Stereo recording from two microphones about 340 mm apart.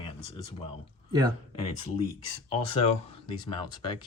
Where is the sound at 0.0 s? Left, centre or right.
Centre.